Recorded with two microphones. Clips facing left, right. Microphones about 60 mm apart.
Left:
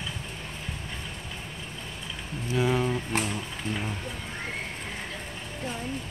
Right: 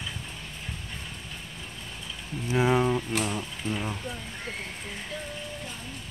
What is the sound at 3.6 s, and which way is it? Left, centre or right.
Speech, left.